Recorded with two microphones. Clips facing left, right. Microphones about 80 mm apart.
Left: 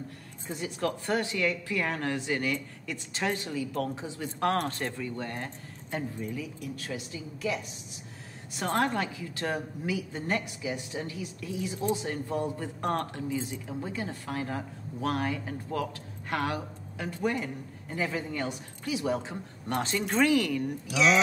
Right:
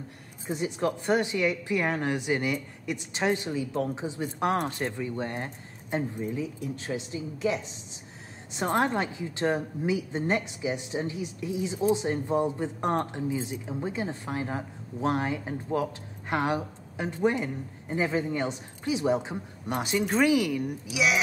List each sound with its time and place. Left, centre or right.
0.5 s speech: right